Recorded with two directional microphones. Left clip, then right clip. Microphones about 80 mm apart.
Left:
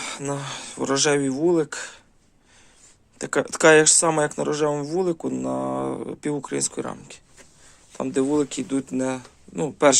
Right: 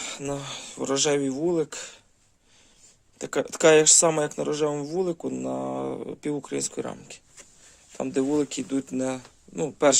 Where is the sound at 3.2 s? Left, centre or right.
Right.